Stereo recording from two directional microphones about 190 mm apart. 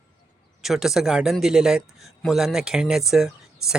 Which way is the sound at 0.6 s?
Centre (ahead or behind).